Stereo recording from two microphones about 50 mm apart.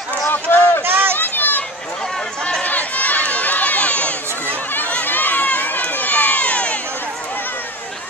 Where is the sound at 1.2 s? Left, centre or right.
Left.